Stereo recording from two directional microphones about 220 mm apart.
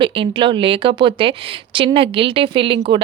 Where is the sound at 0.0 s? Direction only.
25° right (ahead or behind).